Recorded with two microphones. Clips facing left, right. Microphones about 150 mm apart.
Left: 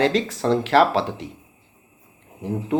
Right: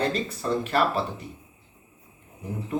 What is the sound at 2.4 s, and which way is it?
Speech, 90° left.